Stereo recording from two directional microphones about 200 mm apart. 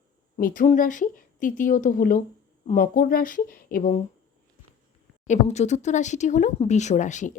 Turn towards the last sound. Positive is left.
turn(degrees=35)  # may be behind; listen again after turning